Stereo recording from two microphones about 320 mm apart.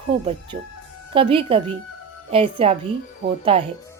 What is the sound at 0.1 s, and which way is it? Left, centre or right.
A woman's voice, centre.